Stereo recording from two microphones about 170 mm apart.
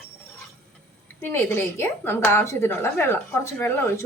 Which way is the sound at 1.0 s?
15° left (ahead or behind).